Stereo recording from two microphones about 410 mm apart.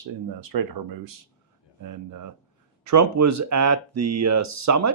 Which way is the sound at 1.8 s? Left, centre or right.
Right.